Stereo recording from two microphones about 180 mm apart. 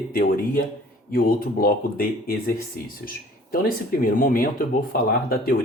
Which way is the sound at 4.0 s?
50° left (ahead or behind).